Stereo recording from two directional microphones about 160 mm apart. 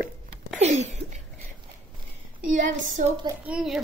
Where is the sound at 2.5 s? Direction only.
50° right (ahead or behind).